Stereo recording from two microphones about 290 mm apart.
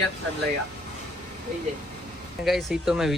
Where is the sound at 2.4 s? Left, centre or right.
Centre.